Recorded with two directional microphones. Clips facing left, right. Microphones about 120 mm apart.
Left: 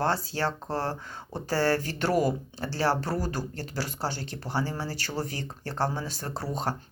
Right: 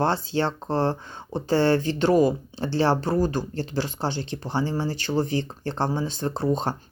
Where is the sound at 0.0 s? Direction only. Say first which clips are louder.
Right 4 dB; 25° right (ahead or behind).